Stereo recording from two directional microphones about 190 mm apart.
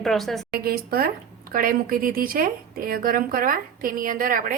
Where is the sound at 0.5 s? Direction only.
55° right (ahead or behind).